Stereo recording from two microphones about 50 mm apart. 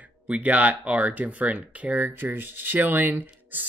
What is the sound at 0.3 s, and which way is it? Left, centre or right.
Speech, right.